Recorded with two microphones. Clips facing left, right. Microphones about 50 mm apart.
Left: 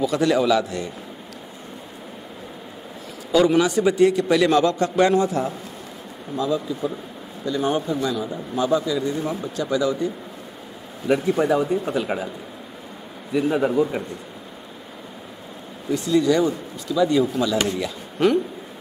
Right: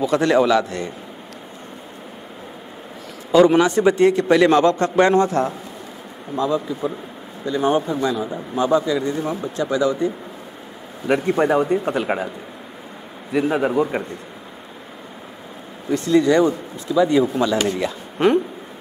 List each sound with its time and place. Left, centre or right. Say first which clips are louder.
0.0 s speech: right 3 dB; right
3.3 s speech: right 4 dB; right
6.3 s speech: right 2 dB; right
11.2 s speech: right 4 dB; right
13.3 s a man's voice: right 1 dB; right
15.9 s speech: right 3 dB; right